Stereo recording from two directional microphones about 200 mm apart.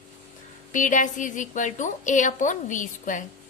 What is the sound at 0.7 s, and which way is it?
A woman's voice, 40° left (ahead or behind).